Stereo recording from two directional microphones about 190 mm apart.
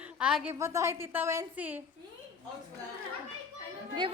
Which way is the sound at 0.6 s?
15° right (ahead or behind).